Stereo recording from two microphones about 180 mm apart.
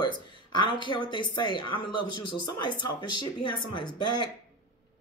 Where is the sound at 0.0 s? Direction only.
25° left (ahead or behind).